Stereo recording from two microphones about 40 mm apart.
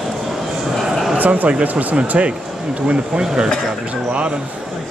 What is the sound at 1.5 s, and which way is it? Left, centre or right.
Speech, right.